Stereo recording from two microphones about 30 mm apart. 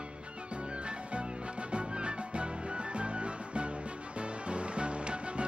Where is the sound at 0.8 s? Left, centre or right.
Right.